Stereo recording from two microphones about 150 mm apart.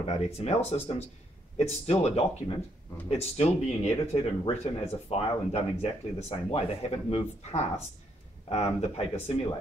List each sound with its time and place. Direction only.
0.0 s speech: 45° left (ahead or behind)